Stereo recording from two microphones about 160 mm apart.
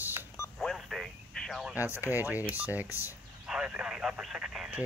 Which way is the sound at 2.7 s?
10° right (ahead or behind).